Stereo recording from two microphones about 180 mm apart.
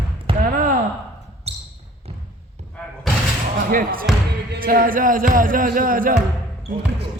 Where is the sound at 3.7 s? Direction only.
50° right (ahead or behind).